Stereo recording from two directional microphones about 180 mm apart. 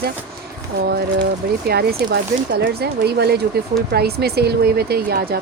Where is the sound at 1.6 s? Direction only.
60° right (ahead or behind).